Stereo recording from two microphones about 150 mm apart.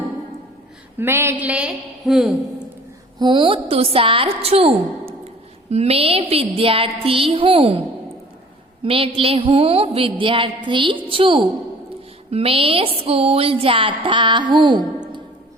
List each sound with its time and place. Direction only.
0.9 s a woman's voice: 15° right (ahead or behind)
3.2 s a woman's voice: 30° right (ahead or behind)
8.8 s speech: 40° right (ahead or behind)